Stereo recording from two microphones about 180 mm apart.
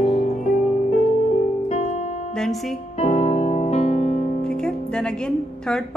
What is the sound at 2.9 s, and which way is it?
Music, 35° left (ahead or behind).